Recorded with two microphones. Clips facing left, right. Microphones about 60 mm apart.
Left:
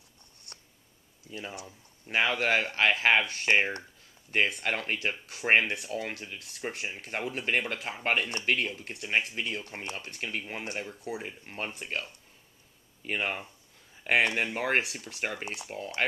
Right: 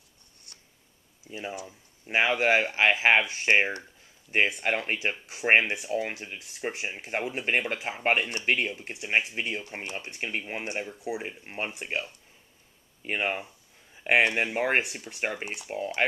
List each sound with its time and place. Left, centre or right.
1.3 s speech: centre